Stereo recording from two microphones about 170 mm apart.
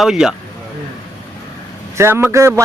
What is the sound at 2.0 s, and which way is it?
Speech, 15° right (ahead or behind).